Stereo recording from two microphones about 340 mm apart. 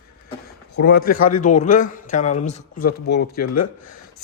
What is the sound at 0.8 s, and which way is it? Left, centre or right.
Speech, left.